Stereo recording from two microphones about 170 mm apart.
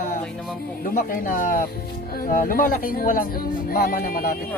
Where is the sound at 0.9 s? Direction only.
55° left (ahead or behind).